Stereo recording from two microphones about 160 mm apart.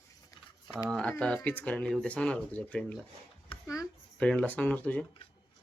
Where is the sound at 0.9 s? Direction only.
5° left (ahead or behind).